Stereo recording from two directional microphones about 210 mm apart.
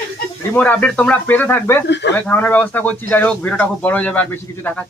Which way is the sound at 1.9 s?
55° left (ahead or behind).